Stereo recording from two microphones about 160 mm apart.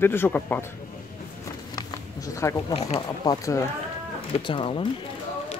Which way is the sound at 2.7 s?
40° left (ahead or behind).